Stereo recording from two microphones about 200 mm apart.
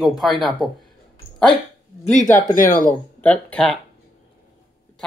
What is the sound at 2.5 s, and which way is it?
Speech, 45° left (ahead or behind).